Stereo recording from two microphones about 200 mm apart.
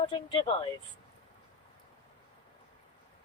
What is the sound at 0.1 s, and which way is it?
Speech, 25° left (ahead or behind).